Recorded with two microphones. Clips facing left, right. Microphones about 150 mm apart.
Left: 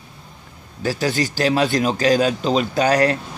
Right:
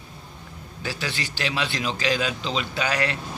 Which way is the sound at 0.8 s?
40° left (ahead or behind).